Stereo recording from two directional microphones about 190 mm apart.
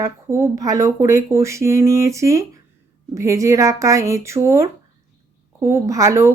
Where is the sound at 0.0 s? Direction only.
15° right (ahead or behind).